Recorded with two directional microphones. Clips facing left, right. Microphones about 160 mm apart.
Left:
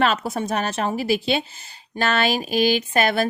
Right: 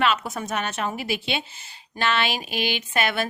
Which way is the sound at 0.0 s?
35° left (ahead or behind).